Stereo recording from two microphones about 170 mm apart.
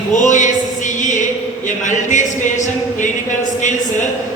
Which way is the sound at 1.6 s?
45° left (ahead or behind).